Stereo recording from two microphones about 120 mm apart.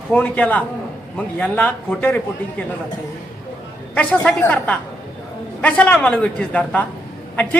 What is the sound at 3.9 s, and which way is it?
A man's voice, 10° left (ahead or behind).